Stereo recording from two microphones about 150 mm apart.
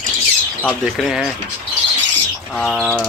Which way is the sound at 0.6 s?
Centre (ahead or behind).